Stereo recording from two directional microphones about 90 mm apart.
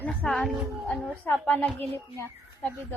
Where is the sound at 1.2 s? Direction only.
15° left (ahead or behind).